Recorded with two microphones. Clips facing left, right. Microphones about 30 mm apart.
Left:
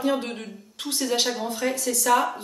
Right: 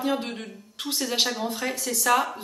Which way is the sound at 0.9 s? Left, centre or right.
Centre.